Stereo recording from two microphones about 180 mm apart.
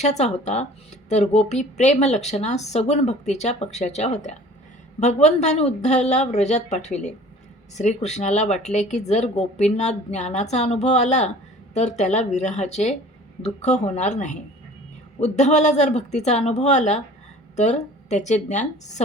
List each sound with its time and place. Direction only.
0.0 s speech: 40° left (ahead or behind)